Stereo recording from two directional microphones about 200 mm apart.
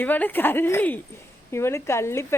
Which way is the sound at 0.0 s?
10° left (ahead or behind).